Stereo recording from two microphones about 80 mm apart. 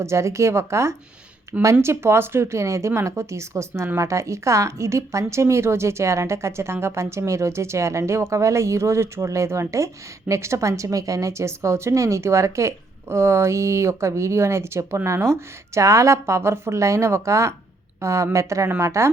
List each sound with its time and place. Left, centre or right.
0.0 s a woman's voice: right